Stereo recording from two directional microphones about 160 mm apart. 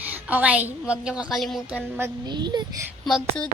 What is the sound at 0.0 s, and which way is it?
A woman's voice, 10° right (ahead or behind).